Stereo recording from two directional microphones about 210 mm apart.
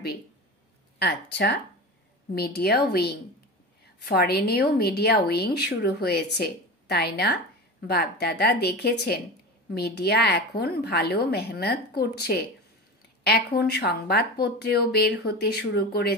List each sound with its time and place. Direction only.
0.9 s a woman's voice: 50° left (ahead or behind)